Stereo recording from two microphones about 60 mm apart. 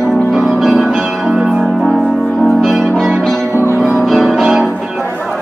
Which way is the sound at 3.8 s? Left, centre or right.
Centre.